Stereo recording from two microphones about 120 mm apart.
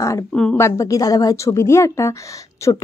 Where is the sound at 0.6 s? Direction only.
25° left (ahead or behind).